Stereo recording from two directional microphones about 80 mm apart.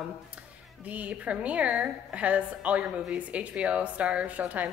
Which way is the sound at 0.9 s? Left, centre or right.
Centre.